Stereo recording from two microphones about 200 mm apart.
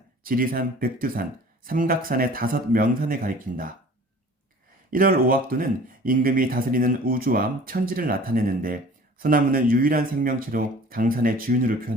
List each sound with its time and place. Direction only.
0.2 s speech: 45° right (ahead or behind)
4.9 s speech: 45° right (ahead or behind)